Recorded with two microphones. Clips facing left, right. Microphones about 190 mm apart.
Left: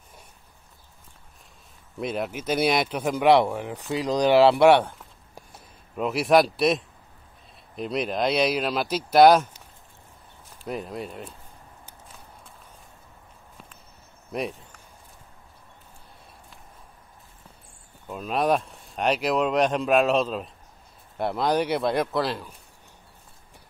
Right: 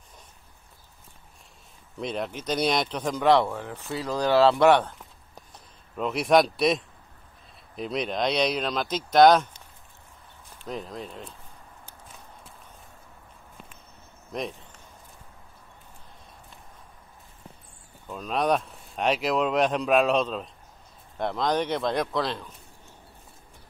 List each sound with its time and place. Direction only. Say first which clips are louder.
2.0 s speech: left 2 dB; 5° left (ahead or behind)
10.7 s speech: left 3 dB; 10° left (ahead or behind)
14.3 s speech: left 3 dB; 10° left (ahead or behind)
18.0 s speech: left 2 dB; 5° left (ahead or behind)